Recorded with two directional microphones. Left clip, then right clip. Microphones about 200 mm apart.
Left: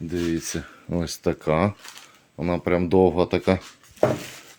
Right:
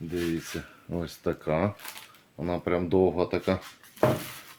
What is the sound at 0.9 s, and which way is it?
Speech, 45° left (ahead or behind).